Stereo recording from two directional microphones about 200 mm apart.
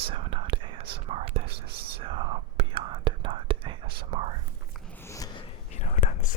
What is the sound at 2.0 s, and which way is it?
Whispering, 25° right (ahead or behind).